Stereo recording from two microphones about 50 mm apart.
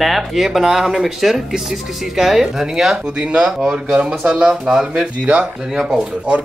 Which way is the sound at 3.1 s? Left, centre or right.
Right.